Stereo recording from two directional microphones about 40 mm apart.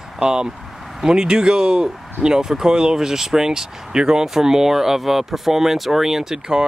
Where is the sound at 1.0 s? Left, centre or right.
Centre.